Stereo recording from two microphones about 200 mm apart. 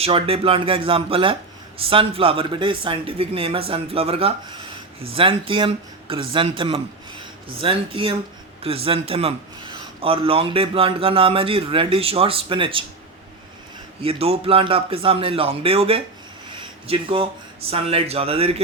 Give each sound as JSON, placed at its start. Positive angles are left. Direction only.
{"t": 0.0, "sound": "a man's voice", "side_deg": -30}
{"t": 14.0, "sound": "a man's voice", "side_deg": -30}